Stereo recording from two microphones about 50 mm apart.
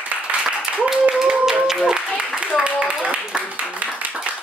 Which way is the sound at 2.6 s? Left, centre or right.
Right.